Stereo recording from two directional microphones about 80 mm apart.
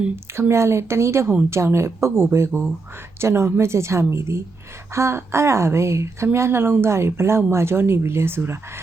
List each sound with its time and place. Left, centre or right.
0.3 s a woman's voice: right